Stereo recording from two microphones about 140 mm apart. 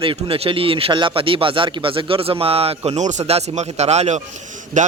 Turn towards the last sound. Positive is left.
turn(degrees=-65)  # may be behind; listen again after turning